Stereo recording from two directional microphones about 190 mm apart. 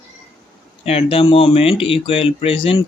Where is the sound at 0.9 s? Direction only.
30° left (ahead or behind).